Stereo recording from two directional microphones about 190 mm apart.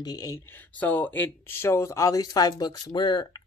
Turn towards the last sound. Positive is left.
turn(degrees=25)  # may be behind; listen again after turning